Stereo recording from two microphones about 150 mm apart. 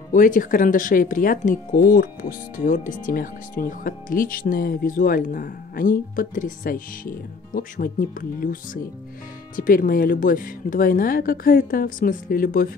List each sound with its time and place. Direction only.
0.1 s speech: 65° left (ahead or behind)